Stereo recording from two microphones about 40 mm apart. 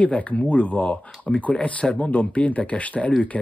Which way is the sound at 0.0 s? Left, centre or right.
Left.